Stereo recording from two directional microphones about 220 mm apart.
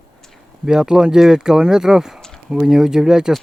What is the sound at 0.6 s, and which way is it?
Speech, 5° right (ahead or behind).